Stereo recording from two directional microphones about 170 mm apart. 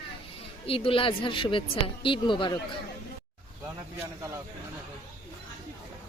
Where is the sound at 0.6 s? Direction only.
35° left (ahead or behind).